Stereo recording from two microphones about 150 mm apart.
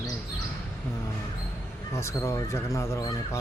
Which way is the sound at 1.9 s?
20° left (ahead or behind).